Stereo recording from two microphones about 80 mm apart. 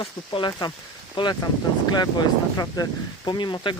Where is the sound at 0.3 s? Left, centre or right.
Left.